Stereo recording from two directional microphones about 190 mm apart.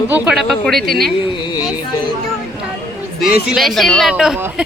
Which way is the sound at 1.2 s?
25° left (ahead or behind).